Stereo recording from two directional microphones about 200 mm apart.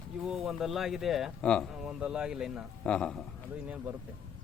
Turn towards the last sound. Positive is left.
turn(degrees=5)  # may be behind; listen again after turning